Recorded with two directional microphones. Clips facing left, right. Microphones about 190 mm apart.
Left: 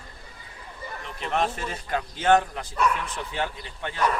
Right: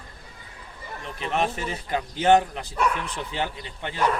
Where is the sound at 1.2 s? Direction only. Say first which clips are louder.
Right 1 dB; 15° right (ahead or behind).